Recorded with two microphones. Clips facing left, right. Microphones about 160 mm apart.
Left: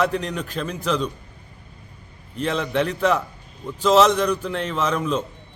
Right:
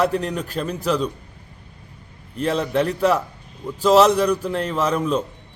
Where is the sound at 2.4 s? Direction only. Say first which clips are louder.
Right 2 dB; 35° right (ahead or behind).